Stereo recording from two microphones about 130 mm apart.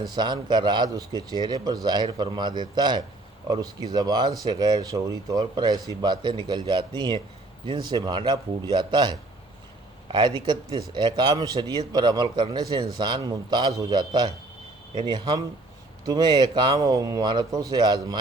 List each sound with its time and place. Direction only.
0.2 s a man's voice: 35° right (ahead or behind)